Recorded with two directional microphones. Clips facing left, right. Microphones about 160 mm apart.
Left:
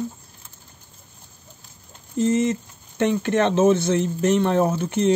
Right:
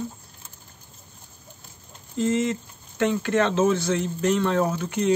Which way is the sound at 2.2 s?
20° left (ahead or behind).